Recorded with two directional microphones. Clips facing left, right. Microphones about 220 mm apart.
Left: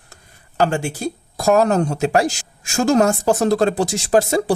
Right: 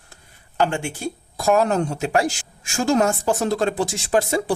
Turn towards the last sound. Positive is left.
turn(degrees=40)  # may be behind; listen again after turning